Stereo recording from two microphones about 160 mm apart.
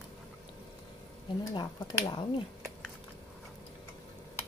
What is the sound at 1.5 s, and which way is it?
Speech, 25° left (ahead or behind).